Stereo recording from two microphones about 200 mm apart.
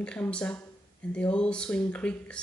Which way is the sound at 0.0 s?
5° left (ahead or behind).